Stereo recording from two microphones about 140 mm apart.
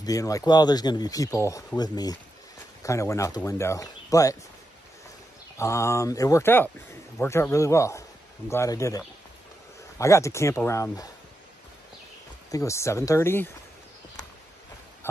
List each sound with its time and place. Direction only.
0.0 s speech: 25° left (ahead or behind)
5.6 s speech: 20° left (ahead or behind)
12.4 s speech: 25° left (ahead or behind)